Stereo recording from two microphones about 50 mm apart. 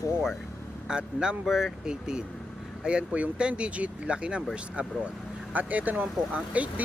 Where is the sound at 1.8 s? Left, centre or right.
Centre.